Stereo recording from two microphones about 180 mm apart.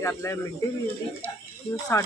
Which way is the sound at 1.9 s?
20° left (ahead or behind).